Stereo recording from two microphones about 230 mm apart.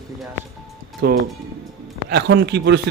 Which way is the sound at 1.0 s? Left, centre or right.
Right.